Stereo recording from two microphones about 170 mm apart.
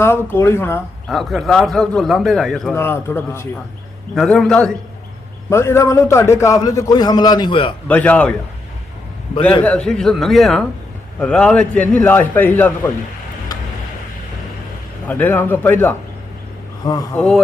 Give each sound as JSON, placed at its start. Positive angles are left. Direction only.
{"t": 0.0, "sound": "a man's voice", "side_deg": 15}
{"t": 1.0, "sound": "a man's voice", "side_deg": 0}
{"t": 2.7, "sound": "a man's voice", "side_deg": 15}
{"t": 4.1, "sound": "a man's voice", "side_deg": 0}
{"t": 5.5, "sound": "a man's voice", "side_deg": 15}
{"t": 7.9, "sound": "a man's voice", "side_deg": 10}
{"t": 9.6, "sound": "a man's voice", "side_deg": 5}
{"t": 13.5, "sound": "tick-tock", "side_deg": 20}
{"t": 15.0, "sound": "a man's voice", "side_deg": 10}
{"t": 16.8, "sound": "a man's voice", "side_deg": 20}
{"t": 17.2, "sound": "a man's voice", "side_deg": 0}